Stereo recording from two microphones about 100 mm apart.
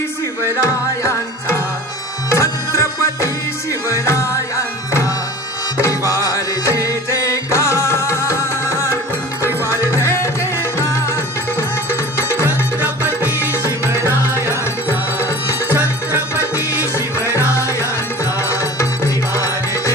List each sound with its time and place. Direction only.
2.2 s music: 30° left (ahead or behind)
6.9 s music: 30° left (ahead or behind)
9.9 s music: 30° left (ahead or behind)
13.0 s music: 25° left (ahead or behind)
16.1 s music: 30° left (ahead or behind)